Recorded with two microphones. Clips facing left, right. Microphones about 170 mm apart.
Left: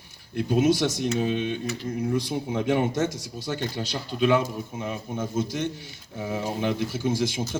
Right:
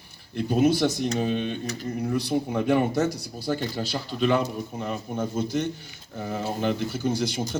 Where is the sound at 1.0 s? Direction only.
45° right (ahead or behind).